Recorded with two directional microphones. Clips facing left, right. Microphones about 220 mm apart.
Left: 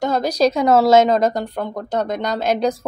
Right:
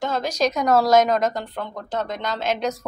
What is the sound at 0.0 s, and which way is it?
Speech, 40° left (ahead or behind).